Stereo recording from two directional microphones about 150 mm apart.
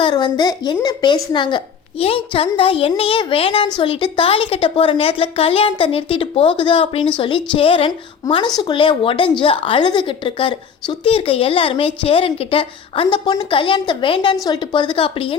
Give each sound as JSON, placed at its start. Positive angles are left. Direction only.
{"t": 0.0, "sound": "a woman's voice", "side_deg": 30}